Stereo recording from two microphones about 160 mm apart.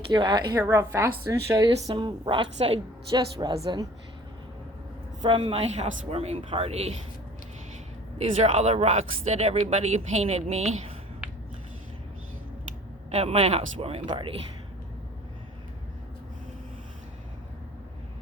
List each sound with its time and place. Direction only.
0.1 s a woman's voice: 30° right (ahead or behind)
5.2 s speech: 30° right (ahead or behind)
8.2 s speech: 40° right (ahead or behind)
13.1 s speech: 40° right (ahead or behind)